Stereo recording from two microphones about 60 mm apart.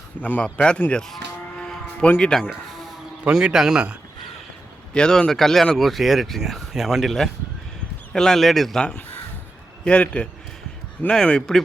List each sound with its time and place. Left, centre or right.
0.2 s a man's voice: left
0.4 s speech: centre
2.2 s speech: centre
2.5 s music: centre
3.2 s a man's voice: centre
4.9 s speech: centre
9.8 s speech: centre